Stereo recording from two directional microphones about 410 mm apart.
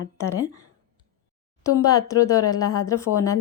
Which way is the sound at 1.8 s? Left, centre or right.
Centre.